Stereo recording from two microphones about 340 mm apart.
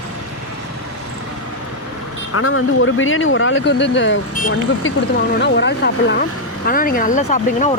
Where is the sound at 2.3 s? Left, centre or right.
Left.